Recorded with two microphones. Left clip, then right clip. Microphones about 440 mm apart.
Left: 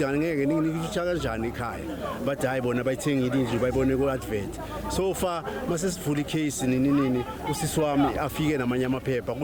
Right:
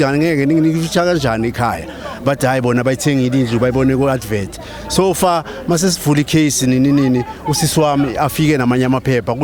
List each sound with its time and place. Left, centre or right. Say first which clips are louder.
0.0 s speech: right 11 dB; right